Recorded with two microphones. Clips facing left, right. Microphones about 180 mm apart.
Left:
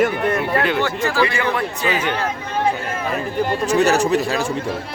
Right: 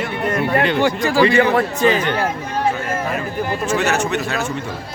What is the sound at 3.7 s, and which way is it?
Speech, 35° left (ahead or behind).